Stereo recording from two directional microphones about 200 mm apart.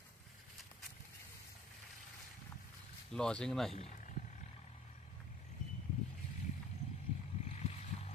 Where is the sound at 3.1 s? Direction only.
5° left (ahead or behind).